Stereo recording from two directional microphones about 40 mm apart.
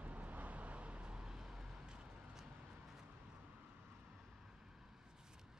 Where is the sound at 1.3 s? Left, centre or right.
Centre.